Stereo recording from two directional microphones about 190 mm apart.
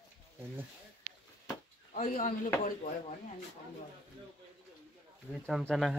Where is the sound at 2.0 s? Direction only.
45° left (ahead or behind).